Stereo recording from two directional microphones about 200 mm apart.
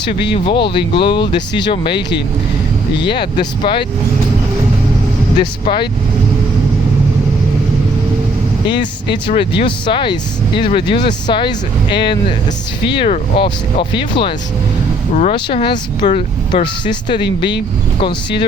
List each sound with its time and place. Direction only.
0.4 s speech: 25° left (ahead or behind)
5.4 s speech: 25° left (ahead or behind)
8.6 s speech: 25° left (ahead or behind)
15.1 s speech: 35° left (ahead or behind)
15.4 s speech: 25° left (ahead or behind)